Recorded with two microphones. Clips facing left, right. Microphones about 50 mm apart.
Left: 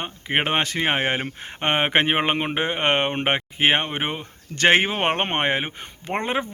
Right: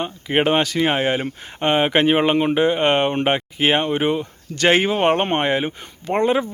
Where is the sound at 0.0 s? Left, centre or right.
Left.